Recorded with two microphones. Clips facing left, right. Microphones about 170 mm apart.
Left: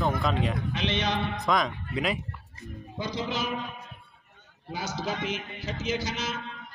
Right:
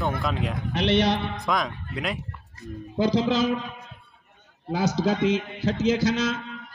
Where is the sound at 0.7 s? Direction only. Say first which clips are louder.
Right 7 dB; 60° right (ahead or behind).